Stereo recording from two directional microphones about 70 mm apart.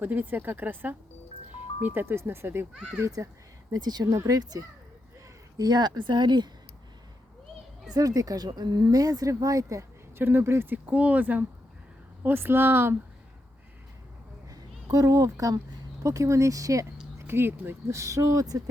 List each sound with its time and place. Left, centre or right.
0.0 s speech: right
3.2 s speech: right
3.7 s speech: right
5.5 s speech: right
7.9 s a woman's voice: right
9.3 s speech: right
10.2 s speech: right
10.8 s speech: right
14.5 s speech: right
17.2 s speech: right